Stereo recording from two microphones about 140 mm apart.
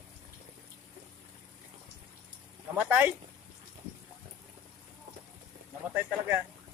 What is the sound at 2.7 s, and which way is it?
Speech, 15° right (ahead or behind).